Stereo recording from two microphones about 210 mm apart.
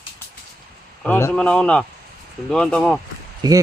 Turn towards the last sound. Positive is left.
turn(degrees=-20)  # may be behind; listen again after turning